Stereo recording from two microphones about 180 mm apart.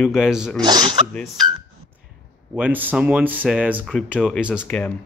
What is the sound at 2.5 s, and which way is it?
Speech, 10° right (ahead or behind).